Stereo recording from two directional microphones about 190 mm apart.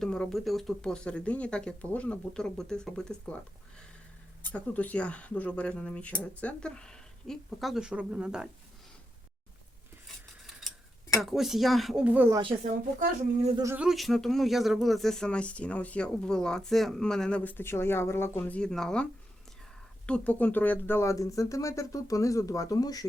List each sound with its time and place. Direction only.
0.0 s speech: 5° left (ahead or behind)
4.4 s speech: 10° left (ahead or behind)
11.2 s speech: centre (ahead or behind)
13.6 s speech: 15° right (ahead or behind)
13.8 s speech: centre (ahead or behind)
20.1 s speech: 5° left (ahead or behind)